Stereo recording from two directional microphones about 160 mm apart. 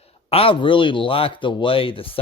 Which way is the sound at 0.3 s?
35° left (ahead or behind).